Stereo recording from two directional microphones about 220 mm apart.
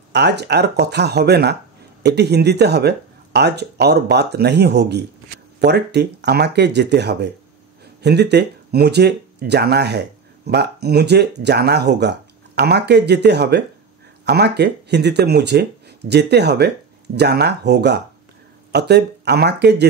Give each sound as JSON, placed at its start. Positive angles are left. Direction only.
{"t": 0.1, "sound": "speech", "side_deg": -50}